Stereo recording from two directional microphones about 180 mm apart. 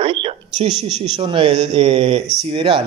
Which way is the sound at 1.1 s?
30° right (ahead or behind).